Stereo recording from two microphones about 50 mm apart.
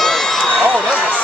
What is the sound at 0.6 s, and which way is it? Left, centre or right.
Run, right.